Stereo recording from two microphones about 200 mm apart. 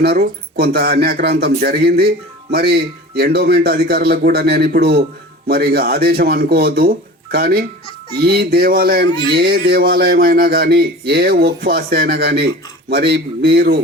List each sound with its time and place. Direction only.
0.0 s speech: 50° right (ahead or behind)